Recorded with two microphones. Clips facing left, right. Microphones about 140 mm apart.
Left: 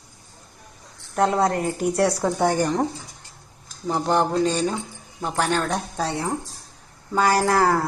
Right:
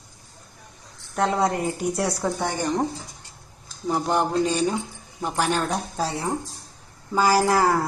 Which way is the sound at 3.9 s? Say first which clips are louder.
Left 2 dB; 5° right (ahead or behind).